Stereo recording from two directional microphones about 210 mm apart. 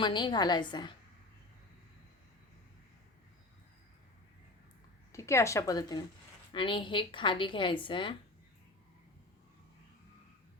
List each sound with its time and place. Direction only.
0.0 s a woman's voice: 20° left (ahead or behind)
5.1 s a woman's voice: 15° left (ahead or behind)